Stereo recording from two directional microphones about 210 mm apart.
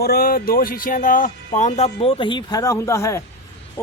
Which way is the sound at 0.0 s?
45° left (ahead or behind).